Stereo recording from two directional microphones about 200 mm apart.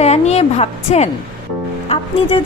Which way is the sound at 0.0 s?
35° left (ahead or behind).